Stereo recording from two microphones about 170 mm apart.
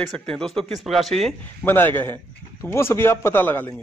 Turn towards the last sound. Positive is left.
turn(degrees=10)  # may be behind; listen again after turning